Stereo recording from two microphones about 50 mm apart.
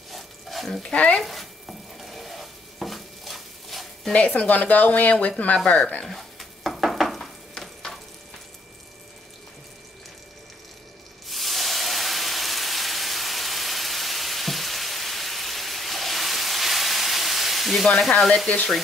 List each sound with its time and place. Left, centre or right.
0.1 s stir: centre
0.8 s speech: left
1.2 s stir: centre
4.1 s speech: left
6.0 s sizzle: centre
11.2 s hiss: centre
18.2 s frying: centre